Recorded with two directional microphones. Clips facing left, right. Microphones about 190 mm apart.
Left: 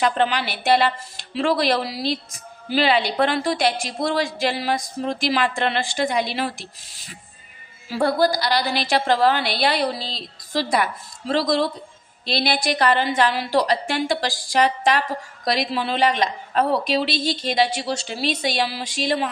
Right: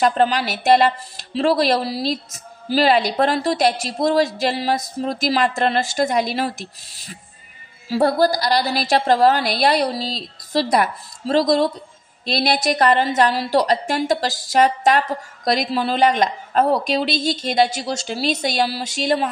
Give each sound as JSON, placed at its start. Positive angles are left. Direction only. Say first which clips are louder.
{"t": 0.0, "sound": "speech", "louder": "right 3 dB", "side_deg": -40}
{"t": 8.0, "sound": "a woman's voice", "louder": "right 2 dB", "side_deg": -40}